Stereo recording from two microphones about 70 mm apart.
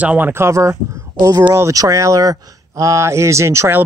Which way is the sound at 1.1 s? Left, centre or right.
Right.